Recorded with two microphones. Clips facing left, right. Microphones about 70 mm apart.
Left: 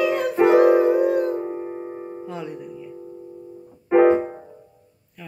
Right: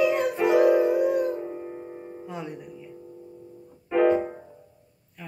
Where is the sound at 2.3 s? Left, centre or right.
Right.